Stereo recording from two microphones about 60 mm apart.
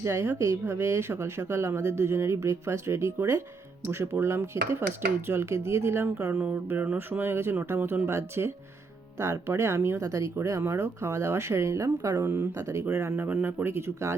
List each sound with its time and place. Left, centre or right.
0.0 s speech: right
3.9 s speech: right
10.0 s speech: right
13.1 s speech: right
13.7 s speech: right